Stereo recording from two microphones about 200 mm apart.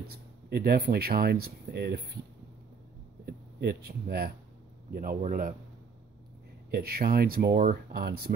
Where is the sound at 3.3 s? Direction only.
50° right (ahead or behind).